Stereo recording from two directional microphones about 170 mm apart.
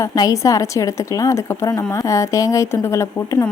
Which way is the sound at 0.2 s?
20° left (ahead or behind).